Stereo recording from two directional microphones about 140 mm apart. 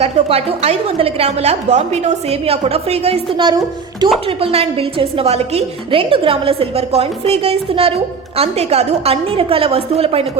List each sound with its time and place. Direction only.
0.0 s a woman's voice: 45° right (ahead or behind)